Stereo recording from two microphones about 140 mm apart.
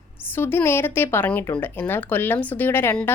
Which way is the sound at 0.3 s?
15° left (ahead or behind).